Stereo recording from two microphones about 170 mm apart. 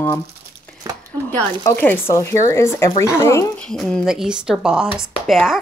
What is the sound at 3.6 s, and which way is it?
Speech, 5° left (ahead or behind).